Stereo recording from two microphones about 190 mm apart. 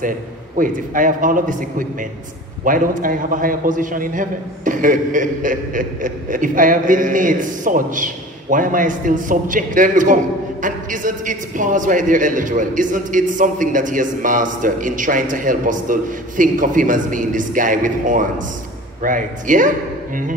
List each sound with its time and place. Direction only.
0.6 s a man's voice: 45° right (ahead or behind)